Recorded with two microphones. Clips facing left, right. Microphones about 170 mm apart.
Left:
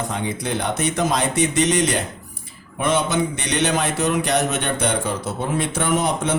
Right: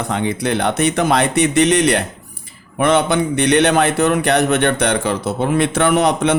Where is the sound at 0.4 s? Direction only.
70° right (ahead or behind).